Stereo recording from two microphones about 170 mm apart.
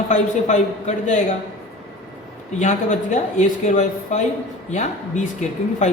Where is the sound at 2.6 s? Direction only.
45° left (ahead or behind).